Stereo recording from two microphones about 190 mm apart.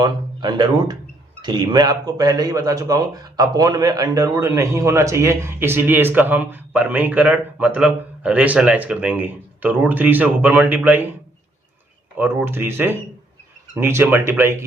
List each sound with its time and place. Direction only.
0.0 s a man's voice: 25° right (ahead or behind)
12.1 s a man's voice: 10° right (ahead or behind)